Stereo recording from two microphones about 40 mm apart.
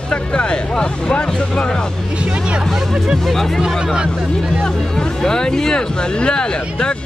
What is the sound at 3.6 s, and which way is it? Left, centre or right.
Speech, centre.